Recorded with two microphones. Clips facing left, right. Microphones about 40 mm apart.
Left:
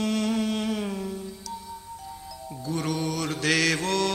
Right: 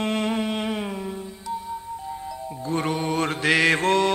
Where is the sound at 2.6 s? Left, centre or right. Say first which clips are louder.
Right 3 dB; right.